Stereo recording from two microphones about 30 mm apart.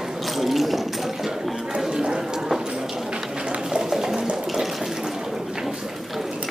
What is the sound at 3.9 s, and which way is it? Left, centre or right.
Water, centre.